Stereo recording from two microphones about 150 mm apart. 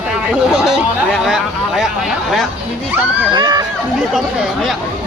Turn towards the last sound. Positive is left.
turn(degrees=-30)  # may be behind; listen again after turning